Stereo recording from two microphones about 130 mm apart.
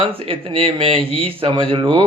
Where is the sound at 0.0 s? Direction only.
45° right (ahead or behind).